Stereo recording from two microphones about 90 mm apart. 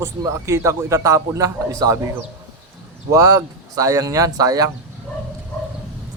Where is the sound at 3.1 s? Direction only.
35° right (ahead or behind).